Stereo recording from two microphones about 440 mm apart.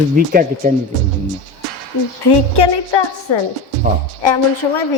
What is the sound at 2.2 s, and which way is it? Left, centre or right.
A woman's voice, left.